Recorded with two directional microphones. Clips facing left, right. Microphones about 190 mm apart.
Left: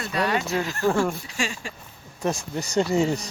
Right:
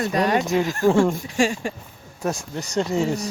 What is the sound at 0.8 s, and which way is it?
Speech, 15° right (ahead or behind).